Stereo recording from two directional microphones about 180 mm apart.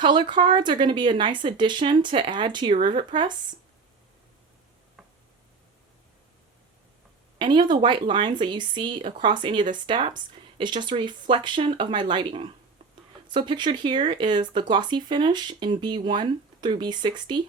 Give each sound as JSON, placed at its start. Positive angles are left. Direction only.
{"t": 0.0, "sound": "speech", "side_deg": -25}
{"t": 7.3, "sound": "speech", "side_deg": -25}